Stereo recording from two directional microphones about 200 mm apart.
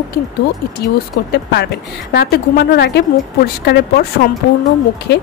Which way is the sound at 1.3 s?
55° left (ahead or behind).